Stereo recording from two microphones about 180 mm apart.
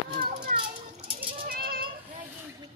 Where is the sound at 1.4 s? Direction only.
55° right (ahead or behind).